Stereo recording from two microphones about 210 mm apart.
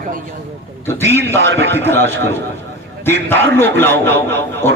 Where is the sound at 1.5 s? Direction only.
55° right (ahead or behind).